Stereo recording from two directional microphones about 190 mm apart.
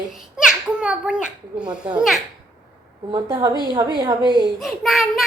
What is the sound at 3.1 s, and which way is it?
A woman's voice, 20° right (ahead or behind).